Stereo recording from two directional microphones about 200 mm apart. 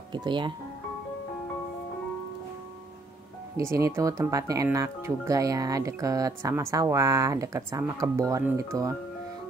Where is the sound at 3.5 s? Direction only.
15° right (ahead or behind).